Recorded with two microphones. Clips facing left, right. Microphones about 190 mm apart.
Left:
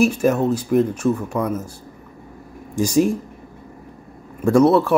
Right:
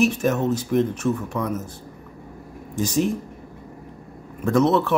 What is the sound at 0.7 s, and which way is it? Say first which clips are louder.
Speech: left 4 dB; 10° left (ahead or behind).